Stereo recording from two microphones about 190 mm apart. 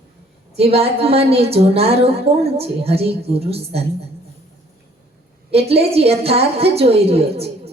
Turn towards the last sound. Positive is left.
turn(degrees=-30)  # may be behind; listen again after turning